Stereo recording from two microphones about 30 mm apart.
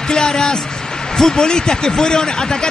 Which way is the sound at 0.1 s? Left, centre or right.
Left.